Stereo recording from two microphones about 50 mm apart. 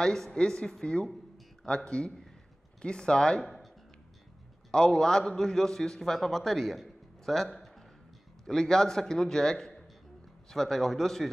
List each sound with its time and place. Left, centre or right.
0.0 s a man's voice: centre
4.6 s a man's voice: centre